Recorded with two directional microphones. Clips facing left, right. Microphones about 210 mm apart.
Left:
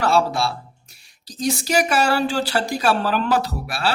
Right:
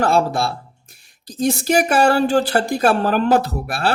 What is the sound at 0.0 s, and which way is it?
Speech, 50° right (ahead or behind).